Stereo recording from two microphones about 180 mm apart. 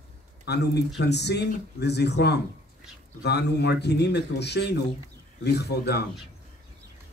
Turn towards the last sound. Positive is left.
turn(degrees=65)  # may be behind; listen again after turning